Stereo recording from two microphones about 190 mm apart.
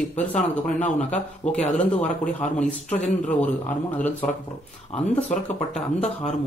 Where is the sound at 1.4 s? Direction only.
35° left (ahead or behind).